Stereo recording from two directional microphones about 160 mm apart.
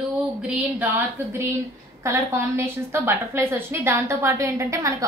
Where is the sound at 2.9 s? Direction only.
15° right (ahead or behind).